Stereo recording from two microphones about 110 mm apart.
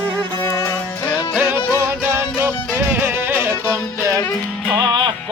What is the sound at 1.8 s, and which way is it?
Music, 25° right (ahead or behind).